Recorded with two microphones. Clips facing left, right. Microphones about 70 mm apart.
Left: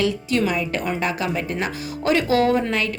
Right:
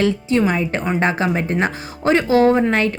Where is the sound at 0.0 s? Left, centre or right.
Right.